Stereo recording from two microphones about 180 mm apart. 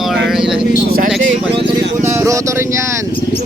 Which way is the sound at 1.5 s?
30° right (ahead or behind).